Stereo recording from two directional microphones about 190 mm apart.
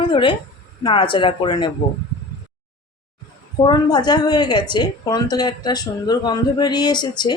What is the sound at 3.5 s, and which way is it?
A woman's voice, 20° left (ahead or behind).